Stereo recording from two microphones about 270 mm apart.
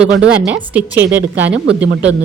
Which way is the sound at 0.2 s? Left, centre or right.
Centre.